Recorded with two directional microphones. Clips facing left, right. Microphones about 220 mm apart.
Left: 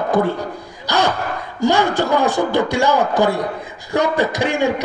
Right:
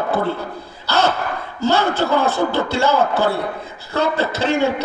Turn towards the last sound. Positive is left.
turn(degrees=15)  # may be behind; listen again after turning